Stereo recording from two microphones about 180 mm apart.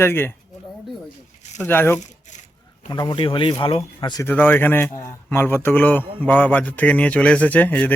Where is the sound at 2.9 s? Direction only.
25° left (ahead or behind).